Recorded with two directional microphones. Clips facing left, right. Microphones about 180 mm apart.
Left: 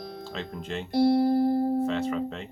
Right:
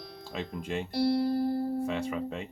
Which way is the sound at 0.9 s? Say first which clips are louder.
Left 6 dB; 50° left (ahead or behind).